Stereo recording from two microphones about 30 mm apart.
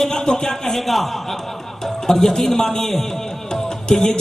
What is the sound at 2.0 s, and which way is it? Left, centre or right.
Speech, centre.